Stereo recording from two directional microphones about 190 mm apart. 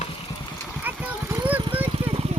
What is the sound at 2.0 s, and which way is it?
Vehicle, 30° right (ahead or behind).